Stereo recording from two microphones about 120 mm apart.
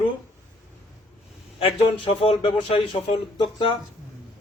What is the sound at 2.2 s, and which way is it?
Speech, 50° left (ahead or behind).